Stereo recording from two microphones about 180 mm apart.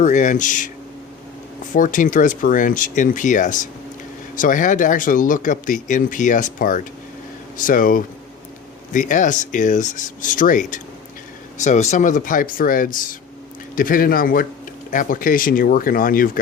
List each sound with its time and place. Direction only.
0.0 s speech: 45° left (ahead or behind)
1.7 s speech: 45° left (ahead or behind)